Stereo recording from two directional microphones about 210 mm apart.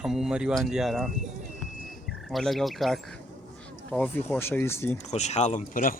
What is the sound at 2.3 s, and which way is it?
A man's voice, centre (ahead or behind).